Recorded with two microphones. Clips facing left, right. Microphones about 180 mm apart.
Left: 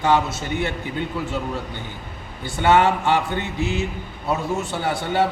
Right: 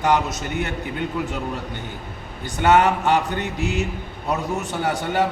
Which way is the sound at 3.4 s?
15° right (ahead or behind).